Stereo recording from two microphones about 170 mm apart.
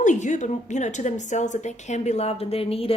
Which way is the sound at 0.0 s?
45° left (ahead or behind).